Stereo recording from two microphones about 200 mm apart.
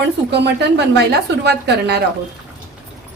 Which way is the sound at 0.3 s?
55° right (ahead or behind).